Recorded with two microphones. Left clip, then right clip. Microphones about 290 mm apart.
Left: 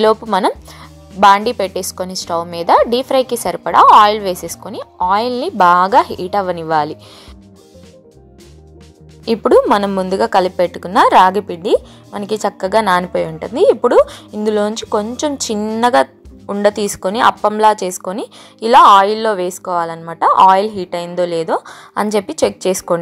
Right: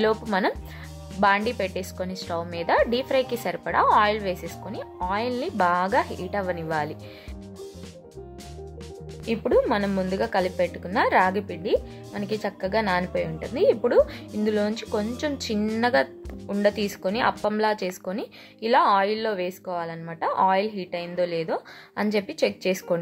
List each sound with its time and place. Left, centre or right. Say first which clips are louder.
0.3 s speech: left 10 dB; left
9.3 s speech: left 11 dB; left
14.9 s a woman's voice: left 10 dB; centre
15.1 s speech: left 9 dB; centre
15.8 s music: left 11 dB; left
16.6 s speech: left 9 dB; left